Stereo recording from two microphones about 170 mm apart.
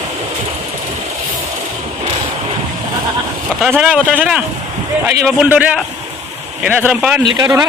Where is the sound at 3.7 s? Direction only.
5° right (ahead or behind).